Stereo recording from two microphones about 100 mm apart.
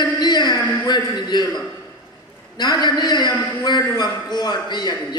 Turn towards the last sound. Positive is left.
turn(degrees=45)  # may be behind; listen again after turning